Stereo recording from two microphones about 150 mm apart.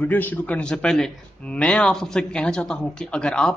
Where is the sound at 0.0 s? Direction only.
10° left (ahead or behind).